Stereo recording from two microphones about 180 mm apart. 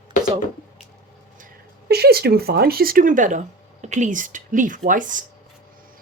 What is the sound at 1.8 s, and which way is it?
Speech, 60° right (ahead or behind).